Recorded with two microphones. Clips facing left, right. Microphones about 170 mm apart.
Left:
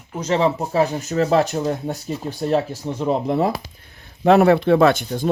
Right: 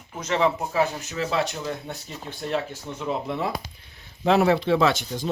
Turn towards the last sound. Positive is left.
turn(degrees=55)  # may be behind; listen again after turning